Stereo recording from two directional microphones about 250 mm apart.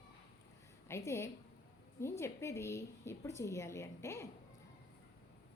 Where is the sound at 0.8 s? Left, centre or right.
Centre.